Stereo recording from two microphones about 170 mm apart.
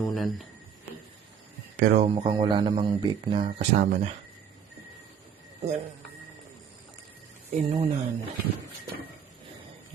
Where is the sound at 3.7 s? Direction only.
45° right (ahead or behind).